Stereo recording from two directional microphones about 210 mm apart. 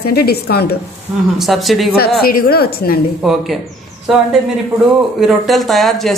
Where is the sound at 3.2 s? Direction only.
Centre (ahead or behind).